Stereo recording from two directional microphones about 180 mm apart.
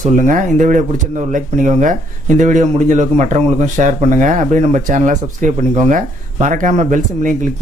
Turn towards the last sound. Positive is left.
turn(degrees=-45)  # may be behind; listen again after turning